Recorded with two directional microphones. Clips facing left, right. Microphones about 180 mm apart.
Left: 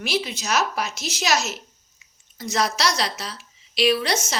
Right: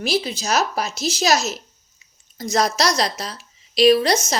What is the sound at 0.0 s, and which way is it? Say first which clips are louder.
A woman's voice: right 4 dB; 35° right (ahead or behind).